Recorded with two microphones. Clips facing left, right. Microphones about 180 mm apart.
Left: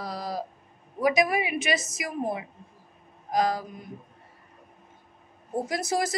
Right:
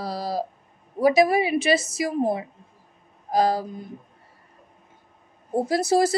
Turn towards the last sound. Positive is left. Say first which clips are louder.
# right 8 dB
turn(degrees=-30)  # may be behind; listen again after turning